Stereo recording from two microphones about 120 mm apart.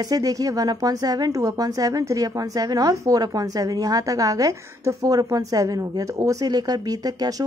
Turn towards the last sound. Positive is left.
turn(degrees=-30)  # may be behind; listen again after turning